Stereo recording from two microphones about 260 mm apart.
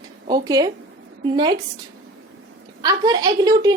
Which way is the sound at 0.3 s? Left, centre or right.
Centre.